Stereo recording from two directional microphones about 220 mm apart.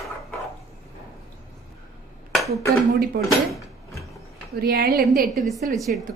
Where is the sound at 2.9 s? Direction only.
45° right (ahead or behind).